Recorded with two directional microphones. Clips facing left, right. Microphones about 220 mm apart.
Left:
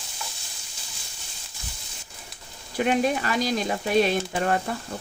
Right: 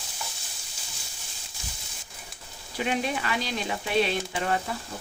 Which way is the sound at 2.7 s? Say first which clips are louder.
Left 6 dB; 50° left (ahead or behind).